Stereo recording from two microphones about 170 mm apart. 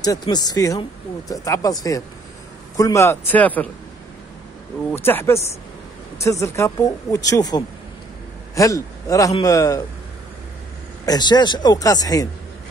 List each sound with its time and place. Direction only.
0.0 s speech: 25° left (ahead or behind)
4.9 s speech: 15° left (ahead or behind)
11.1 s speech: 25° left (ahead or behind)